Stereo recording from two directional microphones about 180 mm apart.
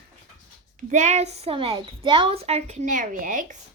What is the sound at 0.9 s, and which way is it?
A woman's voice, 40° right (ahead or behind).